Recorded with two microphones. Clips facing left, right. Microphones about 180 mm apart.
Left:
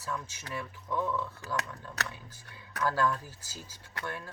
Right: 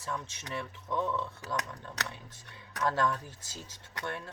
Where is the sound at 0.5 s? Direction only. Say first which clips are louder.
Even; 25° right (ahead or behind).